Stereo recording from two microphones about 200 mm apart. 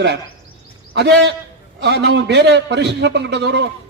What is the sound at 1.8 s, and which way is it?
A man's voice, 60° right (ahead or behind).